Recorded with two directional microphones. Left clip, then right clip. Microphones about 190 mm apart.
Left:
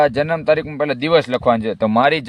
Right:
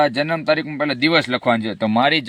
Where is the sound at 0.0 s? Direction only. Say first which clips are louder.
Left 2 dB; 30° left (ahead or behind).